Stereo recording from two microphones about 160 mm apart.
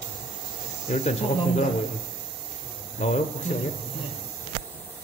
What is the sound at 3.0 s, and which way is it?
Speech, 45° left (ahead or behind).